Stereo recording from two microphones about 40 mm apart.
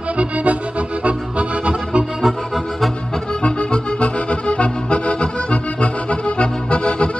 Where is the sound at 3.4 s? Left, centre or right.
Left.